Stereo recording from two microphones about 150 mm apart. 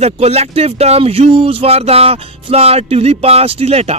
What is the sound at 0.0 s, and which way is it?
Speech, 45° right (ahead or behind).